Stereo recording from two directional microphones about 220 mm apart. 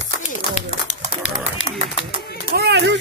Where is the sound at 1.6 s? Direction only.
55° left (ahead or behind).